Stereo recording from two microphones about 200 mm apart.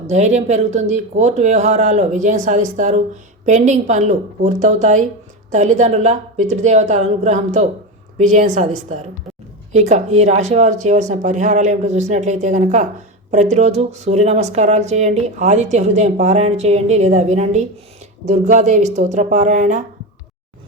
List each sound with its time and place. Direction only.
0.1 s speech: 35° right (ahead or behind)